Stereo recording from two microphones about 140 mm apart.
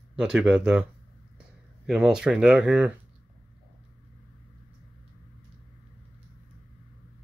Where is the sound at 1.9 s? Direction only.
5° right (ahead or behind).